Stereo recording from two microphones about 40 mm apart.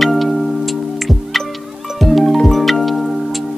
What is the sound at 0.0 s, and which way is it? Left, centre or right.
Music, centre.